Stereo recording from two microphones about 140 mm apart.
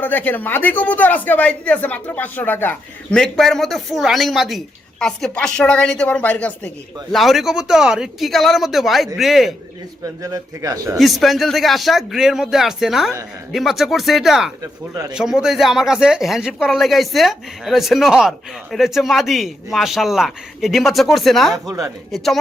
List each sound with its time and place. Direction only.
0.0 s speech: 15° left (ahead or behind)
10.0 s a man's voice: 25° right (ahead or behind)
10.9 s speech: centre (ahead or behind)
21.7 s a man's voice: 25° right (ahead or behind)
22.1 s speech: centre (ahead or behind)